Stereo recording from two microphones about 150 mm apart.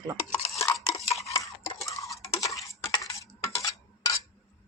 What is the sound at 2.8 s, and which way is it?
Coin, 25° left (ahead or behind).